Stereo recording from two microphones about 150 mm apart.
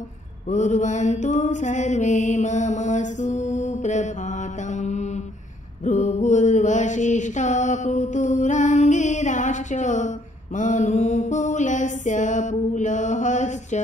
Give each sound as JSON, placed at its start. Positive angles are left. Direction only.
{"t": 0.5, "sound": "mantra", "side_deg": 55}